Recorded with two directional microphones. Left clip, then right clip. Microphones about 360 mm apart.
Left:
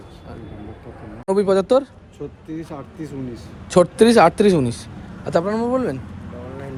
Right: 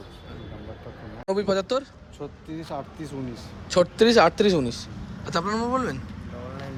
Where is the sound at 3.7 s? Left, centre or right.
Centre.